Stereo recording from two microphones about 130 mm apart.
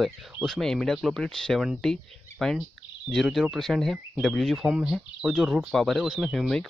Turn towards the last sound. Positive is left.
turn(degrees=0)  # may be behind; listen again after turning